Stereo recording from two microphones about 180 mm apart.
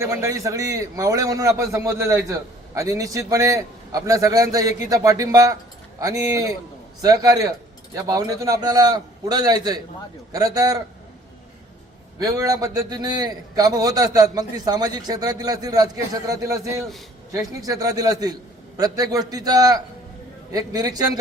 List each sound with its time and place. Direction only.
0.0 s a man's voice: 15° right (ahead or behind)
12.2 s a man's voice: 20° right (ahead or behind)